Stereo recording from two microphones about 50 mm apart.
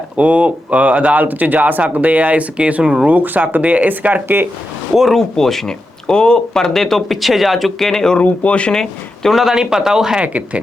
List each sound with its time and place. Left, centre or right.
0.2 s speech: right
3.1 s speech: right
4.9 s speech: centre
8.2 s speech: left
8.7 s speech: centre
9.3 s speech: centre
10.2 s speech: right